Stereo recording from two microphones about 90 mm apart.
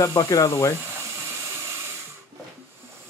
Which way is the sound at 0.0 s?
40° left (ahead or behind).